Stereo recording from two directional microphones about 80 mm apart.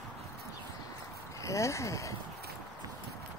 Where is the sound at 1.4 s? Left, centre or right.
Left.